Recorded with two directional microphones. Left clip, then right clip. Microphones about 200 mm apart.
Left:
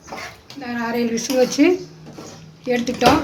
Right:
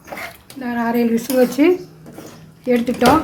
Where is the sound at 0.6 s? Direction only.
15° right (ahead or behind).